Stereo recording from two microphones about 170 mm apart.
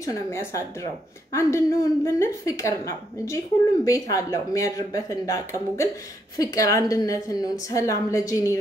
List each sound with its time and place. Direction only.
0.0 s a woman's voice: 20° left (ahead or behind)